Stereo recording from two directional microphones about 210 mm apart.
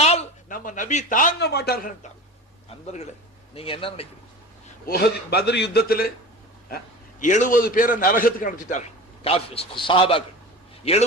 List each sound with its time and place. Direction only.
0.0 s a man's voice: 30° left (ahead or behind); by 1.9 s 45° left (ahead or behind)
2.6 s a man's voice: 30° left (ahead or behind)
4.9 s a man's voice: 50° left (ahead or behind)
7.2 s a man's voice: 35° left (ahead or behind)